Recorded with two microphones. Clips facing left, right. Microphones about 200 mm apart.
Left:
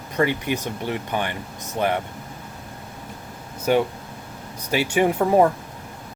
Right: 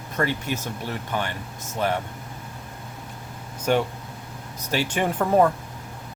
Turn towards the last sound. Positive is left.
turn(degrees=10)  # may be behind; listen again after turning